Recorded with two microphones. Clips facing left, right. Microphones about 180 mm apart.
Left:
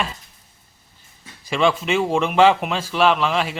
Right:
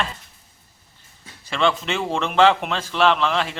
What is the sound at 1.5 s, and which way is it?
A man's voice, 10° left (ahead or behind).